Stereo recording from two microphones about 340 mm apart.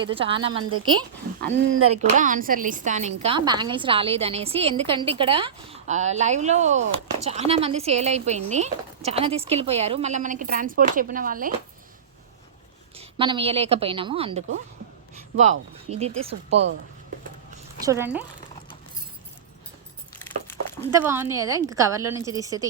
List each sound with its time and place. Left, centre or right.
0.0 s a woman's voice: centre
0.5 s speech: right
1.9 s a woman's voice: centre
13.0 s a woman's voice: centre
17.7 s speech: centre
20.1 s a sound: centre
20.9 s a woman's voice: centre